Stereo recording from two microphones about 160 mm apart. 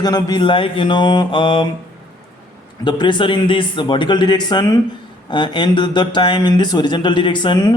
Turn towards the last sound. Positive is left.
turn(degrees=25)  # may be behind; listen again after turning